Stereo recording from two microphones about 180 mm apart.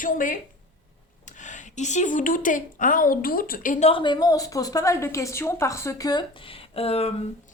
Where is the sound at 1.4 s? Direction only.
45° left (ahead or behind).